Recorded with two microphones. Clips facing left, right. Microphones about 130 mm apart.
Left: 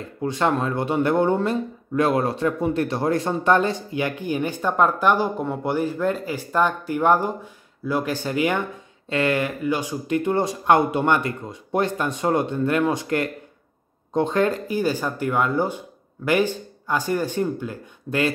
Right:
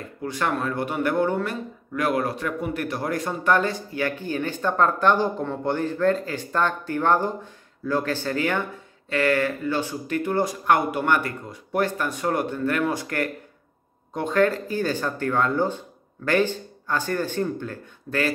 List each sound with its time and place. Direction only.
0.2 s speech: 25° left (ahead or behind)